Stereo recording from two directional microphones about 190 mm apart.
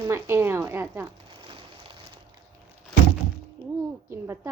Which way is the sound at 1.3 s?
25° right (ahead or behind).